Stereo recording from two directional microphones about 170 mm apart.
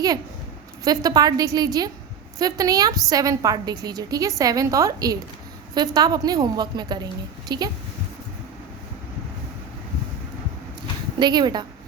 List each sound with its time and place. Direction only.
0.9 s a woman's voice: 20° right (ahead or behind)
11.2 s a woman's voice: 25° right (ahead or behind)